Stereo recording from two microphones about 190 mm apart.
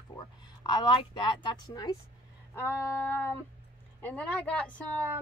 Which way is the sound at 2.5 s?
10° left (ahead or behind).